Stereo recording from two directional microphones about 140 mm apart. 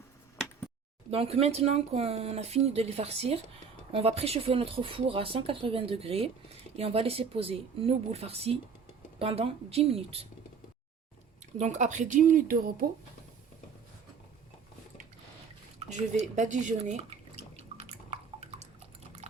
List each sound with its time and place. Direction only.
1.1 s speech: 45° right (ahead or behind)
11.5 s speech: 55° right (ahead or behind); by 12.7 s 80° right
16.1 s drip: 60° right (ahead or behind); by 18.4 s 45° right (ahead or behind)